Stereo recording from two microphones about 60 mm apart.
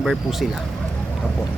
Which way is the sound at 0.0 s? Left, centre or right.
Centre.